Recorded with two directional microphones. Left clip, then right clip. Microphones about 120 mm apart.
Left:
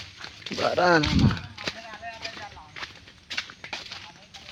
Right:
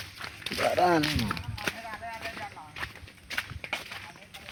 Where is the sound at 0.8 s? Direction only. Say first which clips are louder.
Left 4 dB; 90° left.